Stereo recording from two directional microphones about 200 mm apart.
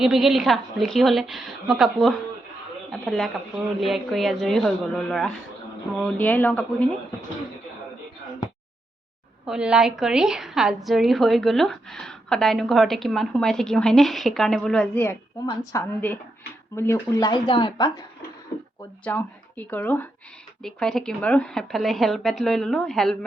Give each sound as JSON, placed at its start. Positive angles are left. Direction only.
{"t": 0.0, "sound": "a woman's voice", "side_deg": 0}
{"t": 9.5, "sound": "a woman's voice", "side_deg": -5}
{"t": 19.0, "sound": "a woman's voice", "side_deg": 10}